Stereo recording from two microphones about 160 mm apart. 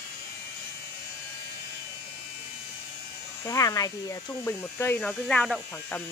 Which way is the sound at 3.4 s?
20° left (ahead or behind).